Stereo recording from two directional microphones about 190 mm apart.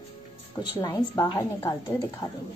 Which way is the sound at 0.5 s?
20° left (ahead or behind).